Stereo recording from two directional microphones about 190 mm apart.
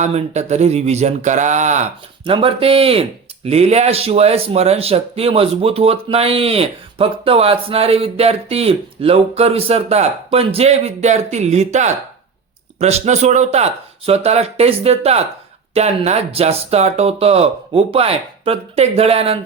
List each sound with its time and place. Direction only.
0.0 s speech: 35° right (ahead or behind)